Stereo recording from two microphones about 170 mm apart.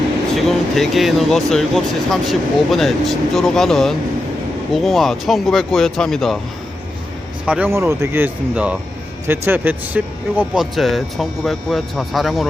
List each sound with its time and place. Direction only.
0.3 s speech: centre (ahead or behind)
7.4 s speech: 10° right (ahead or behind)